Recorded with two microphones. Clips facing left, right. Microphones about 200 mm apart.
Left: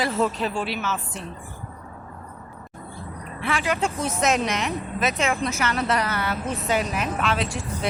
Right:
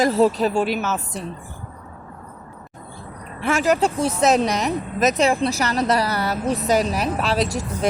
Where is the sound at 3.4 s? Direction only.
45° right (ahead or behind).